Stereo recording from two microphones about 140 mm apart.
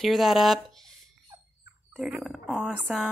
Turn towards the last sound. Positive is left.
turn(degrees=0)  # may be behind; listen again after turning